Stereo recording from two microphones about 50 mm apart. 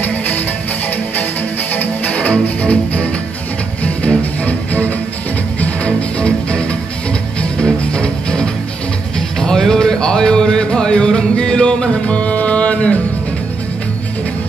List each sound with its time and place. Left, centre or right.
1.8 s music: left
7.8 s music: centre